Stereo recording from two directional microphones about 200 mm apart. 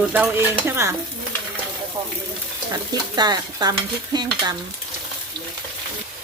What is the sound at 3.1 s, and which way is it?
Stir, 20° right (ahead or behind).